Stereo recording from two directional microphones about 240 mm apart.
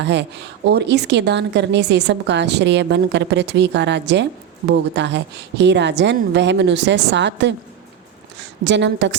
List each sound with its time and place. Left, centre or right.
0.0 s a woman's voice: right